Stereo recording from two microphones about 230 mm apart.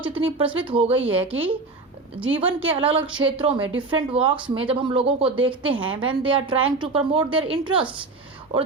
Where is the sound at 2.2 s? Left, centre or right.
Right.